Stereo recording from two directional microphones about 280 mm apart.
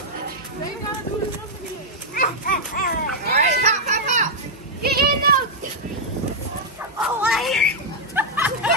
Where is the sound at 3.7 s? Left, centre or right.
Right.